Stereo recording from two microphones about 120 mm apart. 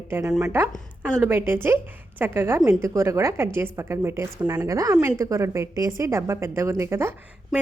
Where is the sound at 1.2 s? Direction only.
20° right (ahead or behind).